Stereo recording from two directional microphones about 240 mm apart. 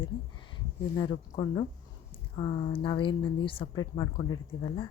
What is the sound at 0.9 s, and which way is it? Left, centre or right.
A woman's voice, centre.